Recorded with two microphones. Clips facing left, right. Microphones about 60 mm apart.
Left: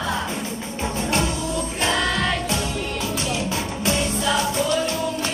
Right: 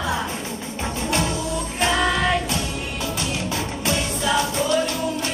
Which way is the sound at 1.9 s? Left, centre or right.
Centre.